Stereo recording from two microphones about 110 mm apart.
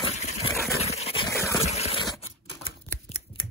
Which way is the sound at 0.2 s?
90° left.